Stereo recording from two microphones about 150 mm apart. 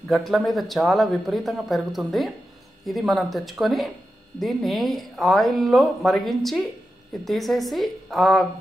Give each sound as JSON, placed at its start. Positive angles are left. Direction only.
{"t": 0.1, "sound": "a woman's voice", "side_deg": 0}